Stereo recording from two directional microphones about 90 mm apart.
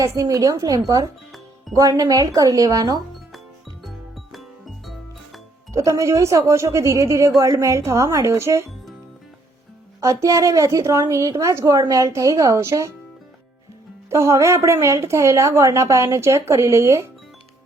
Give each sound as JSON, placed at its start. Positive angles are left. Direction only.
{"t": 0.2, "sound": "speech", "side_deg": -40}
{"t": 3.8, "sound": "music", "side_deg": 0}
{"t": 5.7, "sound": "speech", "side_deg": -35}
{"t": 10.0, "sound": "speech", "side_deg": -35}
{"t": 14.1, "sound": "speech", "side_deg": -35}